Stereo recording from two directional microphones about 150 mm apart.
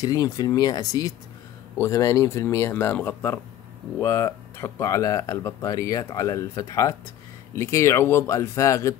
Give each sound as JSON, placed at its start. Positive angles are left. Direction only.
{"t": 0.0, "sound": "speech", "side_deg": 25}